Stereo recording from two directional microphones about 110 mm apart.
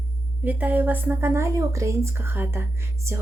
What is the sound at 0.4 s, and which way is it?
A woman's voice, 15° right (ahead or behind).